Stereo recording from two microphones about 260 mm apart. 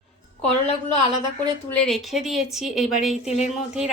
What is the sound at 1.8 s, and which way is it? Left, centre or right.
Speech, centre.